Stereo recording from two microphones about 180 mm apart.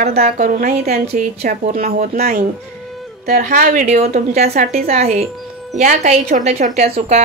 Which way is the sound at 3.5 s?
50° right (ahead or behind).